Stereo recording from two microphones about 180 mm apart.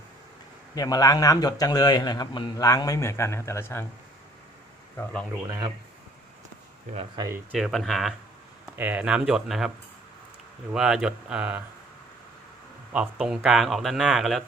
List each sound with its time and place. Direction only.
0.8 s a man's voice: 20° left (ahead or behind)
5.5 s speech: 20° right (ahead or behind)
6.9 s speech: 30° right (ahead or behind)
7.3 s speech: 5° right (ahead or behind)
12.9 s speech: 5° right (ahead or behind)